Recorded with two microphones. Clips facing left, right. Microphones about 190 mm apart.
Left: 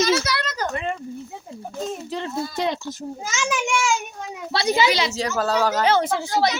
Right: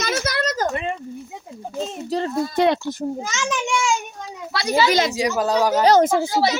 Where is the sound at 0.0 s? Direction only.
45° right (ahead or behind).